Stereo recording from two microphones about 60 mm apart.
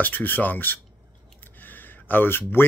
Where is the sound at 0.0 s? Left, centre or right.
Left.